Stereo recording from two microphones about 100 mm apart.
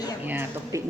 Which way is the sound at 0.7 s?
30° right (ahead or behind).